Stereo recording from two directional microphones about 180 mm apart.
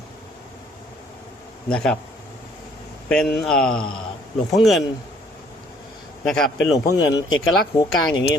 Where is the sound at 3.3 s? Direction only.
5° left (ahead or behind).